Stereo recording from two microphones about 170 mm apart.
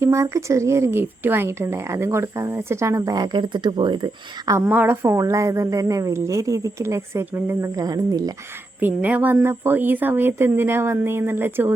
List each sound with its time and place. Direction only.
0.0 s speech: 15° right (ahead or behind)
4.6 s speech: 10° right (ahead or behind)
8.8 s speech: 10° right (ahead or behind)